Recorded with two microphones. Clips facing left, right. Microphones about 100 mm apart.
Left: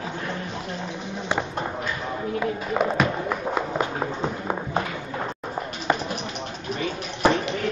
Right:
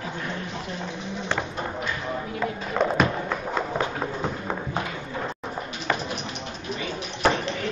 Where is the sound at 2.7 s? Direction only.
Centre (ahead or behind).